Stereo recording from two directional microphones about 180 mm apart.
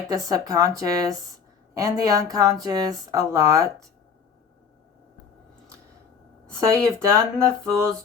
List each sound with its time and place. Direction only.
0.1 s speech: 20° right (ahead or behind)
6.8 s speech: 20° right (ahead or behind)